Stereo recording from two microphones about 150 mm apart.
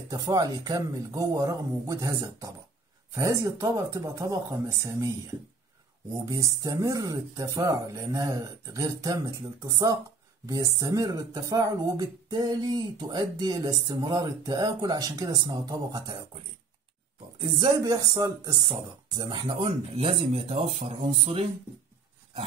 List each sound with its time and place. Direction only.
0.1 s speech: 25° right (ahead or behind)
6.2 s speech: 20° right (ahead or behind)
17.6 s speech: 25° right (ahead or behind)